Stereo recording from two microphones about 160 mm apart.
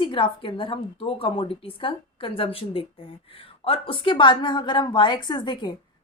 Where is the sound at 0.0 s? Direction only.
30° left (ahead or behind).